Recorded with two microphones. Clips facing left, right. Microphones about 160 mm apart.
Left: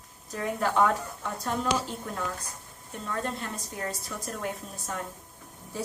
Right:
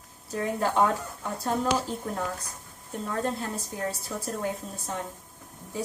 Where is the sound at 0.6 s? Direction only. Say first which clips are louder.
Even; 30° right (ahead or behind).